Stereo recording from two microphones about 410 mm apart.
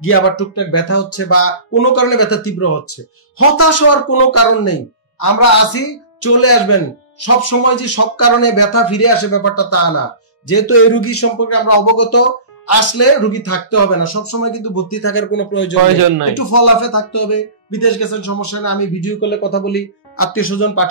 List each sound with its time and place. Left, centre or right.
0.0 s speech: left
15.8 s a man's voice: right
16.3 s speech: left